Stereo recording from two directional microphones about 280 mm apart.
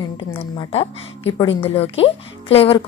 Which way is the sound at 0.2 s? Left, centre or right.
Centre.